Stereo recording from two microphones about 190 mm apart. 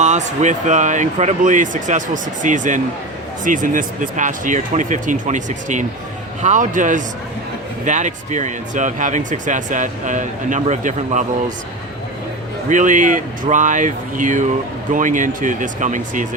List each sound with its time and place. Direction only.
0.0 s speech: 40° right (ahead or behind)
12.6 s speech: 40° right (ahead or behind)